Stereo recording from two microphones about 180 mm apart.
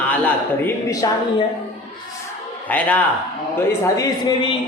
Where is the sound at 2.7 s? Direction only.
10° left (ahead or behind).